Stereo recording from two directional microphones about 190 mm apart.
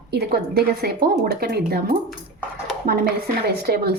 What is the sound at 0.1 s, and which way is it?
Speech, 55° right (ahead or behind).